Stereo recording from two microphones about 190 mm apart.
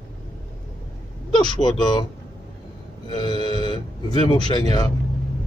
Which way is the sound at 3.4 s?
30° right (ahead or behind).